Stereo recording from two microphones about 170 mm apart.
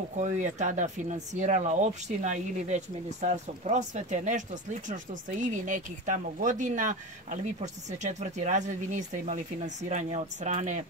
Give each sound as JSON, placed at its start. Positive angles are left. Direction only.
{"t": 0.2, "sound": "speech", "side_deg": -45}
{"t": 5.4, "sound": "speech", "side_deg": -50}